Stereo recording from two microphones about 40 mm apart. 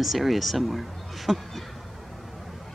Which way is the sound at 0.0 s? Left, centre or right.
Centre.